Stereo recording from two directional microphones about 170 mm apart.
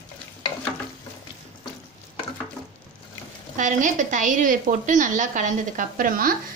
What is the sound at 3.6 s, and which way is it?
A woman's voice, 50° right (ahead or behind).